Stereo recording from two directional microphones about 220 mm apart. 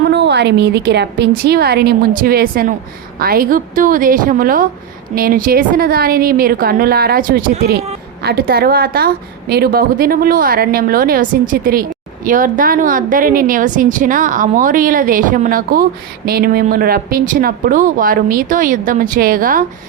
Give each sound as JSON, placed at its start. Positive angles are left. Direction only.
{"t": 0.1, "sound": "a woman's voice", "side_deg": -50}